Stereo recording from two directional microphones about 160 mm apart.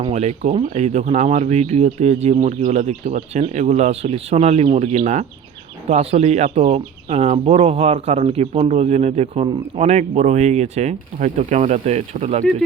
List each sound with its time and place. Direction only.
0.1 s speech: 45° right (ahead or behind)